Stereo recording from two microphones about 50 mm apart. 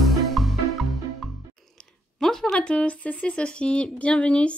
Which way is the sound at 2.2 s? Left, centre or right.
Centre.